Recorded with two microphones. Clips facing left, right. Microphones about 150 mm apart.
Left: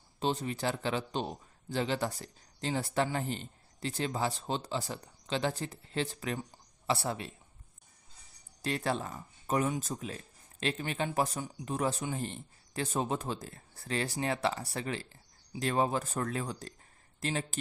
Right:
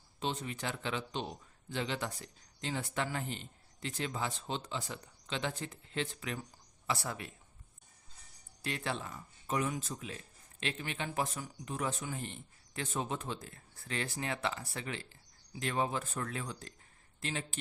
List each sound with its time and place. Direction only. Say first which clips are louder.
0.2 s a man's voice: left 5 dB; 35° left (ahead or behind)
8.6 s a man's voice: left 5 dB; 40° left (ahead or behind)